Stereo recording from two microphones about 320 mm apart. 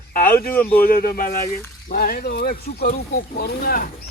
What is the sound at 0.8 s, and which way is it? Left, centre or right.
Speech, left.